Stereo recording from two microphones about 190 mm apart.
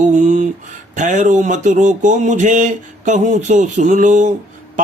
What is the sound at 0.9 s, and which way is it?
Speech, 40° right (ahead or behind).